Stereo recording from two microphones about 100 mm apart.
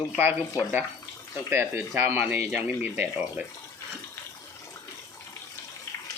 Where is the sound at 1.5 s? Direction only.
25° right (ahead or behind).